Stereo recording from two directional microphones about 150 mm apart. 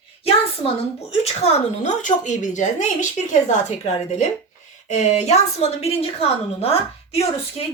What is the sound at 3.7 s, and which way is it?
A woman's voice, 50° left (ahead or behind).